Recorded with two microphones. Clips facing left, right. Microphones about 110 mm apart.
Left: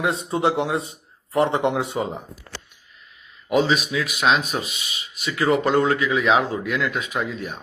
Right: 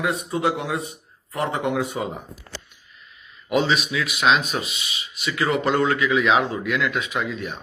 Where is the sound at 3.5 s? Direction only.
40° left (ahead or behind).